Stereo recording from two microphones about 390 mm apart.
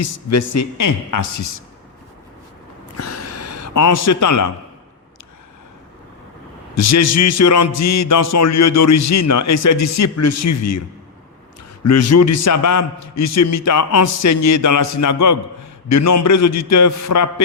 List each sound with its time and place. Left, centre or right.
0.0 s a man's voice: left
3.0 s a sound: left
6.7 s a man's voice: left
11.9 s a man's voice: left